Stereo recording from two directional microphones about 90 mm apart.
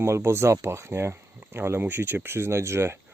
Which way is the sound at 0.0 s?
30° right (ahead or behind).